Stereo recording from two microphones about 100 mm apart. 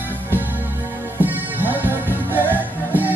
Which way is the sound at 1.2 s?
20° right (ahead or behind).